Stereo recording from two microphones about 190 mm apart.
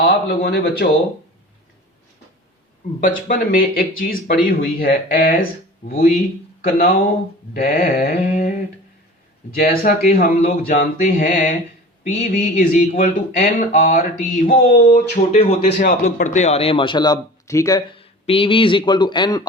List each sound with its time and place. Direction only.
0.0 s speech: 55° left (ahead or behind)
3.0 s speech: 45° left (ahead or behind)
6.7 s speech: 50° left (ahead or behind)
9.6 s speech: 50° left (ahead or behind); by 15.7 s 35° left (ahead or behind)
15.8 s a man's voice: 45° left (ahead or behind); by 19.4 s 25° left (ahead or behind)